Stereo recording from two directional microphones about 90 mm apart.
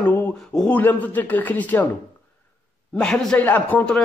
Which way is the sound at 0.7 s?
20° left (ahead or behind).